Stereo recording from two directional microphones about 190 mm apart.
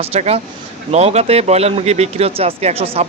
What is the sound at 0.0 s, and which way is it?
Speech, 30° right (ahead or behind).